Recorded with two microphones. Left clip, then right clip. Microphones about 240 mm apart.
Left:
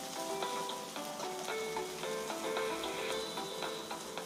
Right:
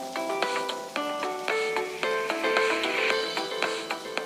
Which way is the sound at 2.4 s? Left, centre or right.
Right.